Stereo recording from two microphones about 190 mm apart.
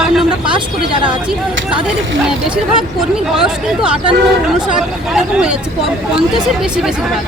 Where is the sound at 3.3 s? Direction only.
5° right (ahead or behind).